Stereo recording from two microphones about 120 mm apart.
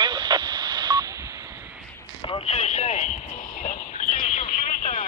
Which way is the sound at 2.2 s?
50° left (ahead or behind).